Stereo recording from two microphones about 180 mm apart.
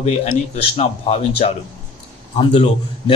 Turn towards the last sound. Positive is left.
turn(degrees=35)  # may be behind; listen again after turning